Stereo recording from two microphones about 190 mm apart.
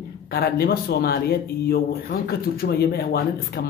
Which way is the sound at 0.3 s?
55° left (ahead or behind).